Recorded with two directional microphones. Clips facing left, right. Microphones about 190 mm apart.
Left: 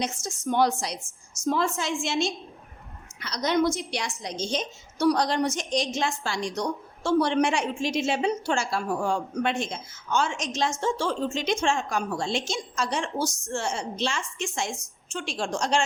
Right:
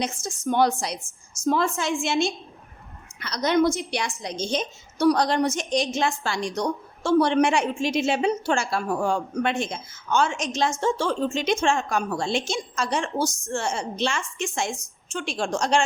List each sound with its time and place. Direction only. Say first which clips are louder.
0.0 s a woman's voice: right 2 dB; 55° right (ahead or behind)